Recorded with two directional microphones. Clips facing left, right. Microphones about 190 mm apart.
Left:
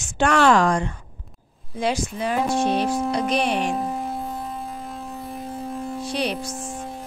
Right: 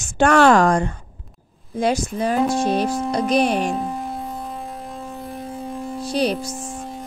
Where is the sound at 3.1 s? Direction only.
40° right (ahead or behind).